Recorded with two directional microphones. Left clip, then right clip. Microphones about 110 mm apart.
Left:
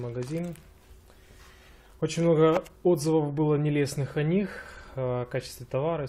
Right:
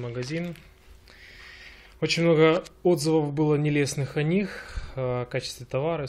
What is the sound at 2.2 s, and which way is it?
Speech, 20° right (ahead or behind).